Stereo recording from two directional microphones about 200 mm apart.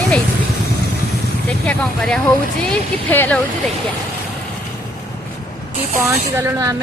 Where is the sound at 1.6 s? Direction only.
5° left (ahead or behind).